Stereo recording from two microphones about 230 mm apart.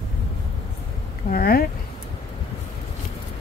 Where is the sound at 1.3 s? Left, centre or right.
Left.